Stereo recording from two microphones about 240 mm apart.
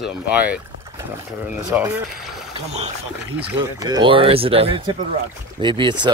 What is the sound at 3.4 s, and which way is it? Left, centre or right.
Speech, centre.